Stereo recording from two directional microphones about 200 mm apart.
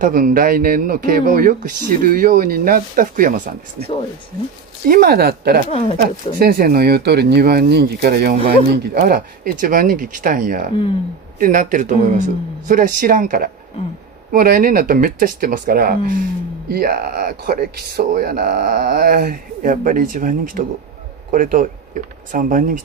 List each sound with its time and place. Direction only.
0.0 s speech: 45° right (ahead or behind)
4.8 s speech: 50° right (ahead or behind)
5.7 s speech: 30° left (ahead or behind)
5.9 s speech: 50° right (ahead or behind)